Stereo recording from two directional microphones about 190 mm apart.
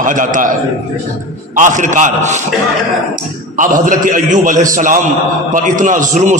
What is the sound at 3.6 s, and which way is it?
A man's voice, 45° right (ahead or behind).